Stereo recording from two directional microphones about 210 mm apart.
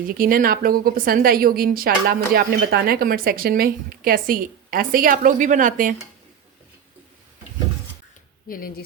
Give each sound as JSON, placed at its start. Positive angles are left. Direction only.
{"t": 0.1, "sound": "a woman's voice", "side_deg": -40}
{"t": 8.5, "sound": "speech", "side_deg": 45}